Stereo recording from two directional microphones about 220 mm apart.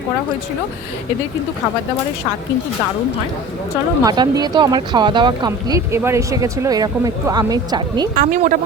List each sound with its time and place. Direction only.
4.0 s speech: 20° right (ahead or behind)
8.1 s speech: 40° right (ahead or behind)